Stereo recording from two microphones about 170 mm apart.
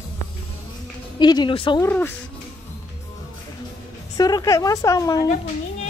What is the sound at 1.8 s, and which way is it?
Speech, 10° left (ahead or behind).